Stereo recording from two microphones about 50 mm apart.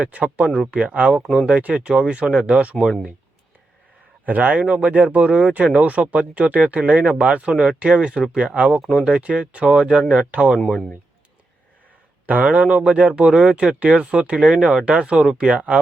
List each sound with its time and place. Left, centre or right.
0.0 s speech: right
4.3 s speech: right
12.2 s speech: right